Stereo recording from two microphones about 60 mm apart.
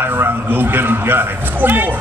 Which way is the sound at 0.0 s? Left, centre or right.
Right.